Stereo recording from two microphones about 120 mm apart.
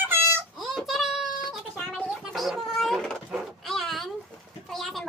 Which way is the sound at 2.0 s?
5° right (ahead or behind).